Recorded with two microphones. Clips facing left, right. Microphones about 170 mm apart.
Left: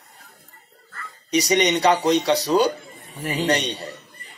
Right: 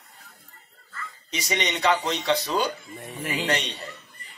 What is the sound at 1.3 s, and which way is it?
A man's voice, 40° left (ahead or behind).